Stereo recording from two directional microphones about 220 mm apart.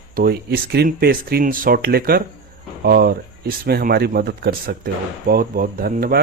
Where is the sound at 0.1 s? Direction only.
40° right (ahead or behind).